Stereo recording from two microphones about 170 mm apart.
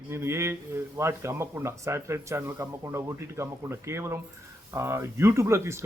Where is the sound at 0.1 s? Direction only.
15° right (ahead or behind).